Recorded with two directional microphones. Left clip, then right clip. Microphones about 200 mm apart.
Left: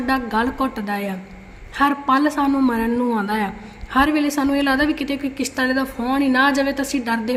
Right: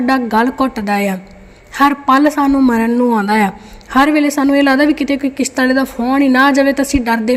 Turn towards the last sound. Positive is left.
turn(degrees=-35)  # may be behind; listen again after turning